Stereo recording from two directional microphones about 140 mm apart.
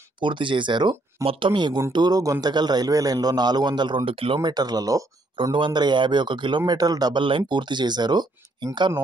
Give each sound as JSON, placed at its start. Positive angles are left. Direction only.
{"t": 0.2, "sound": "a man's voice", "side_deg": -35}